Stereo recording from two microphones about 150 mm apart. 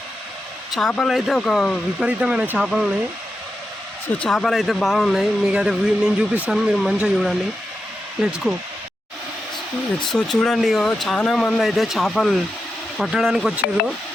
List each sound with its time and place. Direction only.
0.7 s speech: 5° left (ahead or behind)
4.2 s speech: 5° left (ahead or behind)
10.1 s speech: 5° left (ahead or behind)